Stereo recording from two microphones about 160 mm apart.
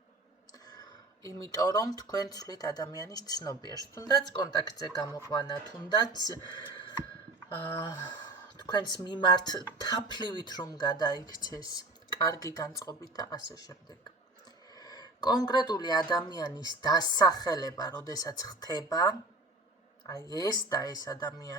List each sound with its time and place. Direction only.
1.2 s speech: 20° left (ahead or behind)
8.6 s speech: 25° left (ahead or behind)
14.8 s speech: 25° left (ahead or behind)